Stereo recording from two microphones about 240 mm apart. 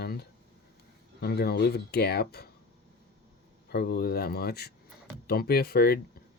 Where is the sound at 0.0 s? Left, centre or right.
Left.